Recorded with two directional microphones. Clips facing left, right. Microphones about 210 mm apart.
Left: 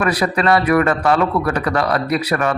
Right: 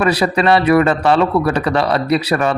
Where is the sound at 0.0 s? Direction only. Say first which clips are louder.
Right 3 dB; 25° right (ahead or behind).